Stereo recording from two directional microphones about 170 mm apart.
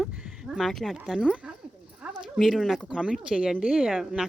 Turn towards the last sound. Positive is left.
turn(degrees=0)  # may be behind; listen again after turning